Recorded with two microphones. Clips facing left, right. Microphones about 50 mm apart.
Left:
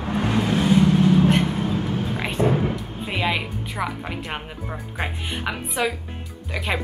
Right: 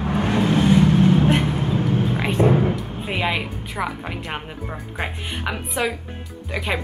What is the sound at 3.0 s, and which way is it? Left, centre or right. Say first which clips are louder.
Speech: even; centre.